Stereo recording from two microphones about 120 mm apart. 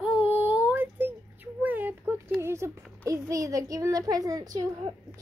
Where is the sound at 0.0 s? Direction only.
15° right (ahead or behind).